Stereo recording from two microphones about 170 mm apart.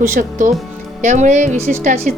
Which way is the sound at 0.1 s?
50° right (ahead or behind).